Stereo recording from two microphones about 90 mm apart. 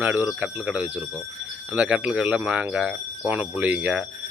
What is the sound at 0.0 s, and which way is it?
Cricket, 20° right (ahead or behind).